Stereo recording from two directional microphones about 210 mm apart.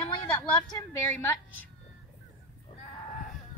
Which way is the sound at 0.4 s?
10° left (ahead or behind).